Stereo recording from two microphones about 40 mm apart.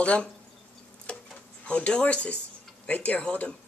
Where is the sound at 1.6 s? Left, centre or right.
Left.